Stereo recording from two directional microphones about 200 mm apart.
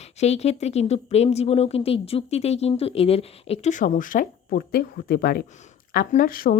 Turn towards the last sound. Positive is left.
turn(degrees=45)  # may be behind; listen again after turning